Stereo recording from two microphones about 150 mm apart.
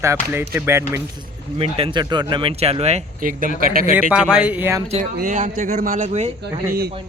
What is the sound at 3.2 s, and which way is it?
Speech, 65° right (ahead or behind).